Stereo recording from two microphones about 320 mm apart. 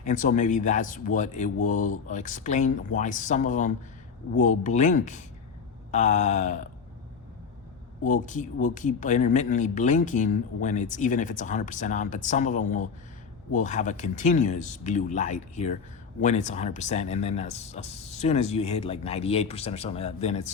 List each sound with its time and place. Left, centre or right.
0.0 s speech: left
8.0 s speech: left